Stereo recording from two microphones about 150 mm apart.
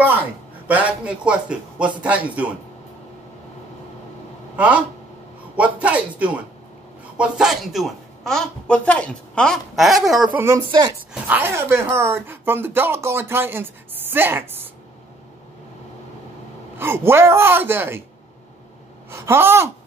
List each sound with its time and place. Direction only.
0.7 s speech: 10° right (ahead or behind)
5.6 s a woman's voice: 10° right (ahead or behind)
10.3 s speech: 15° right (ahead or behind)
16.7 s speech: 15° right (ahead or behind)
19.0 s speech: 15° right (ahead or behind)